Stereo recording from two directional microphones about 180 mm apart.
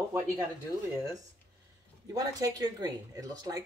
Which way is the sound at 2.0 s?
20° right (ahead or behind).